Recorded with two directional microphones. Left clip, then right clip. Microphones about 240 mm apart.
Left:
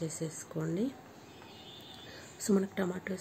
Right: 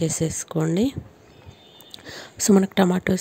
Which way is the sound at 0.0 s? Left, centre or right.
Right.